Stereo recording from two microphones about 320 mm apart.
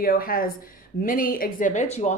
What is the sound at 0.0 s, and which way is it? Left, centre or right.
Speech, left.